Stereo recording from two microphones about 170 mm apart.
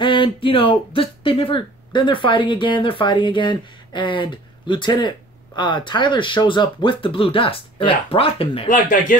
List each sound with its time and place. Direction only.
0.0 s speech: 30° left (ahead or behind)
8.6 s speech: 50° left (ahead or behind)